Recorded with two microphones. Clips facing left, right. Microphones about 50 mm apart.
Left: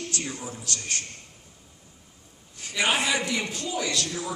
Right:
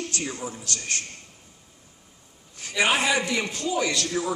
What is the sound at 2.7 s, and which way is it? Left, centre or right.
Speech, right.